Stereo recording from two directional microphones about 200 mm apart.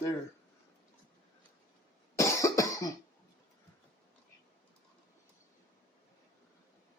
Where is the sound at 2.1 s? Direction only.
15° left (ahead or behind).